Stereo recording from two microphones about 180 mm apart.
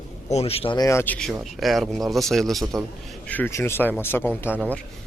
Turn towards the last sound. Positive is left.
turn(degrees=-10)  # may be behind; listen again after turning